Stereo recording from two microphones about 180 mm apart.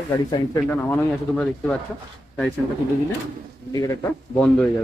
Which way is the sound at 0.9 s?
5° left (ahead or behind).